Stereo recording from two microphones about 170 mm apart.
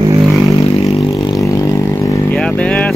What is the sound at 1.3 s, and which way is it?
Vehicle, 20° left (ahead or behind).